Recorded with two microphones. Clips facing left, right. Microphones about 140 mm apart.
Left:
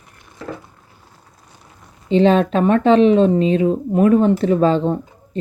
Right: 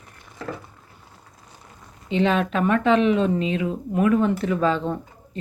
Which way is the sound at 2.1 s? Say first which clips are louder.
Left 7 dB; 30° left (ahead or behind).